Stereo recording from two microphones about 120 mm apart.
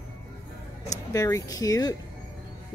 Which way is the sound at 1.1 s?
25° left (ahead or behind).